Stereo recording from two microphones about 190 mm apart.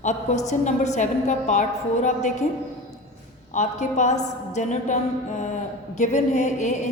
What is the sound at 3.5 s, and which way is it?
A woman's voice, 35° left (ahead or behind).